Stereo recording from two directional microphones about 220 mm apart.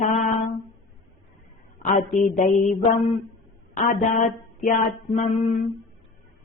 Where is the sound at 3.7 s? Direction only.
40° left (ahead or behind).